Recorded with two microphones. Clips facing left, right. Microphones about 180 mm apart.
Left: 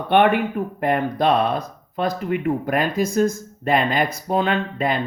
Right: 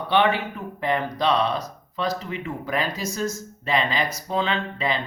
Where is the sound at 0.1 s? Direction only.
55° left (ahead or behind).